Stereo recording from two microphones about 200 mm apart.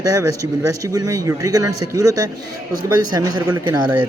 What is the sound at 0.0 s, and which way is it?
Speech, 15° right (ahead or behind).